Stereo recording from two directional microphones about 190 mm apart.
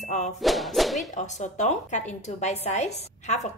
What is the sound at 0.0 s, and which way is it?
Music, 40° left (ahead or behind).